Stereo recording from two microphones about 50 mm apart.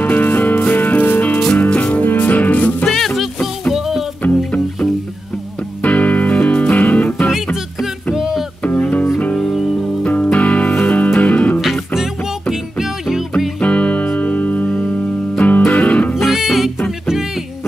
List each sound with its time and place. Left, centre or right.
0.0 s music: left
1.7 s music: left
2.0 s music: left
2.8 s music: centre
3.7 s music: centre
4.2 s music: left
5.8 s music: left
7.8 s music: centre
8.6 s music: left
9.3 s music: centre
10.0 s music: left
11.6 s music: centre
13.6 s music: left
16.3 s music: centre